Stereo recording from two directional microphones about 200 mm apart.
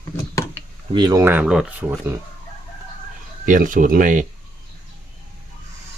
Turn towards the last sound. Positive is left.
turn(degrees=-40)  # may be behind; listen again after turning